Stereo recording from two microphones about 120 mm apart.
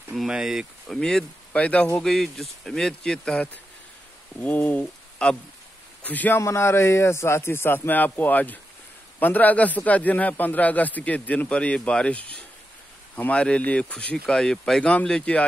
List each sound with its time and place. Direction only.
0.1 s speech: centre (ahead or behind)
4.4 s a sound: 10° left (ahead or behind)
6.0 s a man's voice: 15° left (ahead or behind)